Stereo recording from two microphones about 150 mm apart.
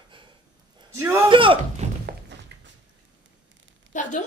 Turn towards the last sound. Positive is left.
turn(degrees=55)  # may be behind; listen again after turning